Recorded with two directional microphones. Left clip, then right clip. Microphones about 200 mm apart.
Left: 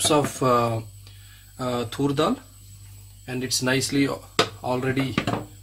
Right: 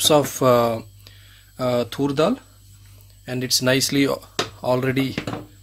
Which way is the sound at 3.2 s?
50° right (ahead or behind).